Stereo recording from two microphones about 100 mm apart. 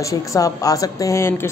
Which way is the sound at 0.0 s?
35° left (ahead or behind).